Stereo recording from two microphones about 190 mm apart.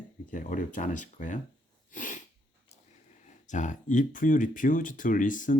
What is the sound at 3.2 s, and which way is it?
Speech, 40° left (ahead or behind).